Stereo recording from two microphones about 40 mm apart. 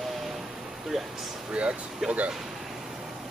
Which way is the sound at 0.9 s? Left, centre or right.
Centre.